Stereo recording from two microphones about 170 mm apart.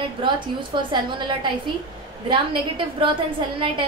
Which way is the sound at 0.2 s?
30° right (ahead or behind).